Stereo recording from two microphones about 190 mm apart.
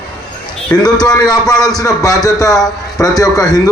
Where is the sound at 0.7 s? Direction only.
20° left (ahead or behind).